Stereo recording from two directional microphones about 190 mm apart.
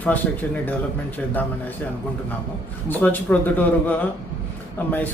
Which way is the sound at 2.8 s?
10° left (ahead or behind).